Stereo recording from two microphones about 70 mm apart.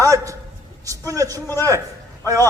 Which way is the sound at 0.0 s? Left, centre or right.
Right.